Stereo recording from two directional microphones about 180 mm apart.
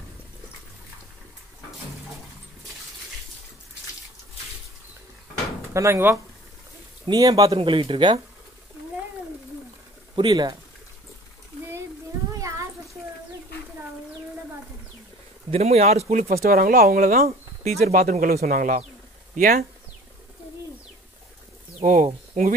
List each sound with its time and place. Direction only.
5.7 s speech: 15° right (ahead or behind)
10.1 s speech: 25° right (ahead or behind)
12.4 s a sound: 15° right (ahead or behind)
15.5 s speech: 35° right (ahead or behind)
16.4 s speech: 55° right (ahead or behind)
21.8 s speech: 45° right (ahead or behind)